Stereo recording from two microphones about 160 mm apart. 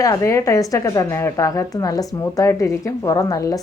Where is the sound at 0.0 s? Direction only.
20° left (ahead or behind).